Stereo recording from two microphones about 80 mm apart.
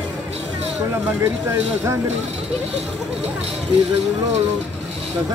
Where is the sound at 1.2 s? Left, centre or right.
Right.